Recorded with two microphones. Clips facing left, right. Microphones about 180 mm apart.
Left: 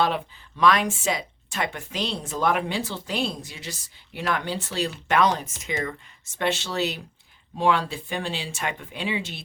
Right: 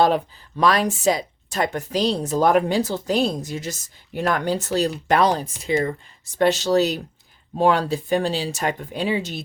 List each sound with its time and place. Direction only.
0.0 s speech: 40° right (ahead or behind)